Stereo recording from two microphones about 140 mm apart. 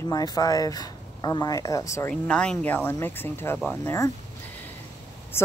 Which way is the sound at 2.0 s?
5° left (ahead or behind).